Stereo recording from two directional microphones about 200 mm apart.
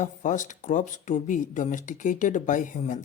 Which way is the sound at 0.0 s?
40° left (ahead or behind).